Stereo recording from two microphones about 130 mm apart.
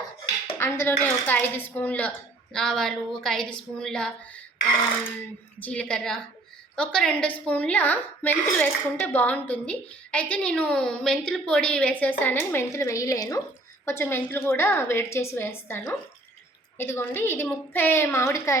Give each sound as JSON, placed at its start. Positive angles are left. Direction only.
{"t": 0.4, "sound": "a woman's voice", "side_deg": 20}
{"t": 5.5, "sound": "a woman's voice", "side_deg": 10}